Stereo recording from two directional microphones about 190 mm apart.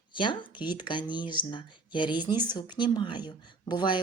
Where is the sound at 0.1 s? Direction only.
25° left (ahead or behind).